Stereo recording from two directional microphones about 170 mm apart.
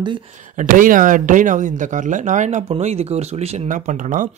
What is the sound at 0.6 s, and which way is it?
Speech, 50° right (ahead or behind).